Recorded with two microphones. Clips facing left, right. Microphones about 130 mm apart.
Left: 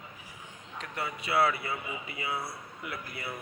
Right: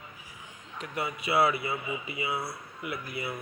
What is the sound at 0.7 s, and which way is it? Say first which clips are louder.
Speech: right 3 dB; 10° right (ahead or behind).